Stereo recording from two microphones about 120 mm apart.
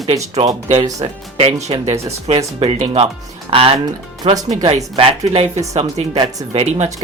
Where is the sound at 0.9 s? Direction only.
55° right (ahead or behind).